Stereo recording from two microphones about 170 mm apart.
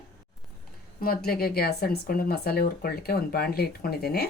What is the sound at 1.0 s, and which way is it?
Speech, 60° left (ahead or behind).